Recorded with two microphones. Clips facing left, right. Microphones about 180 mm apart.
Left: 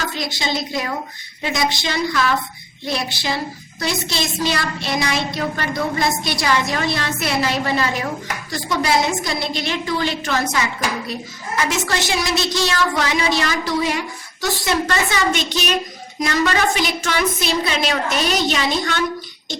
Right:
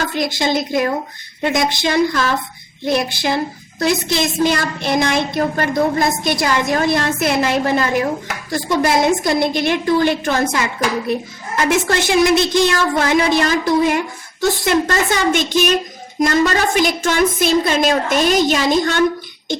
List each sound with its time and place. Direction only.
0.1 s a woman's voice: 55° right (ahead or behind)